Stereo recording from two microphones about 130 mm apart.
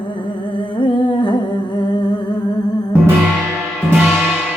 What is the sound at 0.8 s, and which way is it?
Humming, 40° left (ahead or behind).